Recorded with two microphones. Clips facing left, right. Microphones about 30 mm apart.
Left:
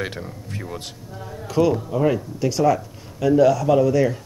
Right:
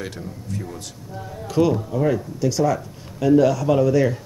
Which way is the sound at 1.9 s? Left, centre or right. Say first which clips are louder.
Left 1 dB; centre.